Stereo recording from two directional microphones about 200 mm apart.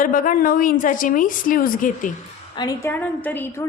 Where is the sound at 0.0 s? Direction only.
45° left (ahead or behind).